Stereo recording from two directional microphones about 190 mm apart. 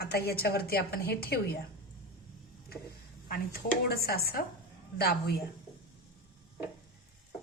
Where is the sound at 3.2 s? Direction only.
55° left (ahead or behind).